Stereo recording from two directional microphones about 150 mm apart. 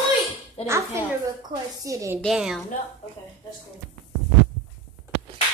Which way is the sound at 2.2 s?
5° right (ahead or behind).